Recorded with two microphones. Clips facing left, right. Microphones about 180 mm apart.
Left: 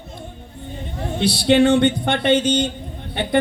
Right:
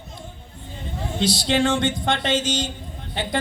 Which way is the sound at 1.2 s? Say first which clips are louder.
Left 6 dB; 60° left (ahead or behind).